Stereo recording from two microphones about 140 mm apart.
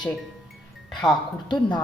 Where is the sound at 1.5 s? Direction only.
30° left (ahead or behind).